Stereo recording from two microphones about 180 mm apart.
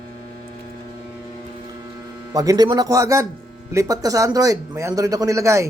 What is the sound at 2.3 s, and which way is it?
A man's voice, 20° right (ahead or behind).